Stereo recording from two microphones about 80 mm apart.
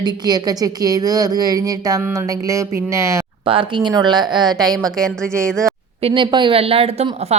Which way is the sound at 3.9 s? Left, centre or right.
Right.